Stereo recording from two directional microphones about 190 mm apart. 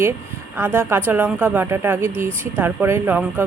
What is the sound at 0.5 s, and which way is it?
Speech, 10° right (ahead or behind).